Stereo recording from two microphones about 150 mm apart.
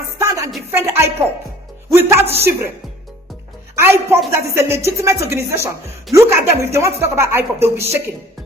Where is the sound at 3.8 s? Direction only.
15° right (ahead or behind).